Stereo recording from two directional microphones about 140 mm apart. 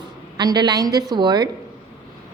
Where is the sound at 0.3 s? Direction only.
30° right (ahead or behind).